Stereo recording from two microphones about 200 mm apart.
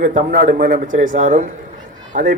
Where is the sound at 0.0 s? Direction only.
40° right (ahead or behind).